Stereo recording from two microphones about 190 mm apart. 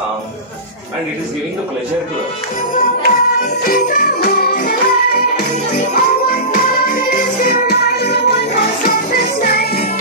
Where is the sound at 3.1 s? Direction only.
45° left (ahead or behind).